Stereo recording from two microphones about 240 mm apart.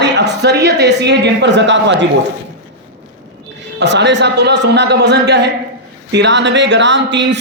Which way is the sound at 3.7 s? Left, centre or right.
Right.